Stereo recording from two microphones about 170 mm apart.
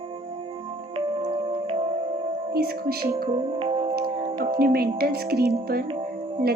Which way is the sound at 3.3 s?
35° right (ahead or behind).